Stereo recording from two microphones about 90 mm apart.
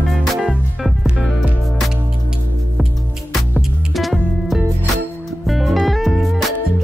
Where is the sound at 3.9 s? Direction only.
Centre (ahead or behind).